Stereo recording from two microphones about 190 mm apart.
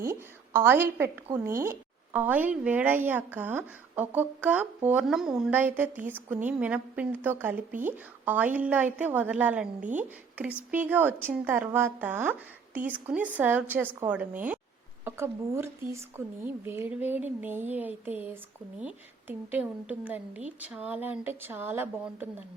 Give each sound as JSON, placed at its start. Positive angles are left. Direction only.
{"t": 0.0, "sound": "a woman's voice", "side_deg": -15}